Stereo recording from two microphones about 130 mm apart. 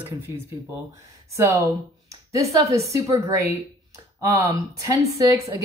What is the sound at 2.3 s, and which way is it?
Speech, 25° right (ahead or behind).